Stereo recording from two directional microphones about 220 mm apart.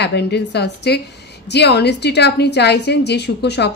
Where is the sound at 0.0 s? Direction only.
50° left (ahead or behind).